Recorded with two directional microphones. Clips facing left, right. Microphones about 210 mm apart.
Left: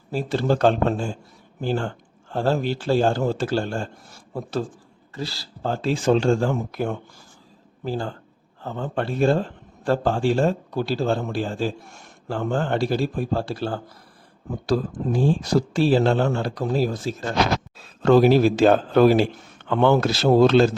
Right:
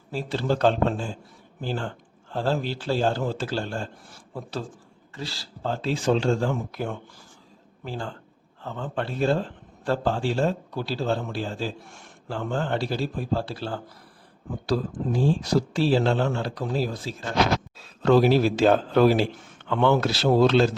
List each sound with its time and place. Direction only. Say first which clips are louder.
0.1 s a man's voice: left 4 dB; 45° left (ahead or behind)
5.1 s a man's voice: left 4 dB; 40° left (ahead or behind)